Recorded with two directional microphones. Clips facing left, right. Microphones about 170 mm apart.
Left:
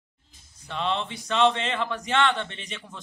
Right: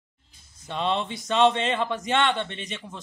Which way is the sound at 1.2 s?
20° right (ahead or behind).